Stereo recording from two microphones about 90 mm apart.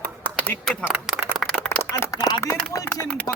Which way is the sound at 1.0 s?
Centre (ahead or behind).